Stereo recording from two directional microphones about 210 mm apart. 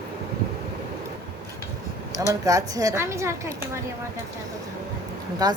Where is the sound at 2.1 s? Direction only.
15° right (ahead or behind).